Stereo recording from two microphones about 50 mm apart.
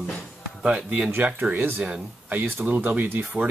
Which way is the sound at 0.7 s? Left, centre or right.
Centre.